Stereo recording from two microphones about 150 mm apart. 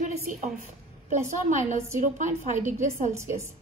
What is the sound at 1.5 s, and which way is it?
A woman's voice, 55° right (ahead or behind).